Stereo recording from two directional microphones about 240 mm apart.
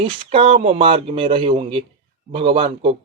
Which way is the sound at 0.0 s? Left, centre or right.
Right.